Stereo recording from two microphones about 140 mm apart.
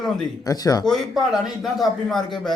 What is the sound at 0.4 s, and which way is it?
Speech, 25° left (ahead or behind).